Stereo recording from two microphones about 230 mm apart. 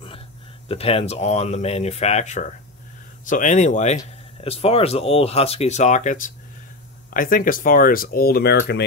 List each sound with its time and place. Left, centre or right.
0.7 s speech: left